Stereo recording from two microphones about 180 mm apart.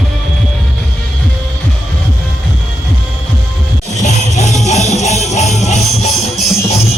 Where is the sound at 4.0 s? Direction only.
40° left (ahead or behind).